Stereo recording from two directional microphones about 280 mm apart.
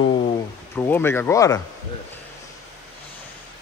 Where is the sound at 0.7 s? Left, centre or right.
Centre.